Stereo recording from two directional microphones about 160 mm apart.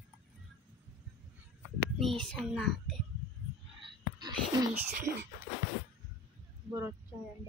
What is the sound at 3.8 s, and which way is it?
Whispering, 30° right (ahead or behind).